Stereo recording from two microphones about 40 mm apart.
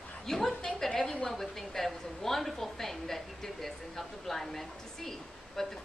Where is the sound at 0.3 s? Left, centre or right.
Centre.